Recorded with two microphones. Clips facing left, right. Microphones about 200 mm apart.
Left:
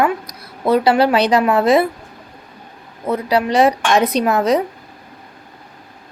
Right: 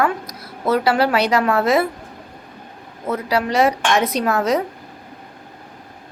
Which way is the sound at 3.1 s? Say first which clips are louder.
Left 3 dB; 20° left (ahead or behind).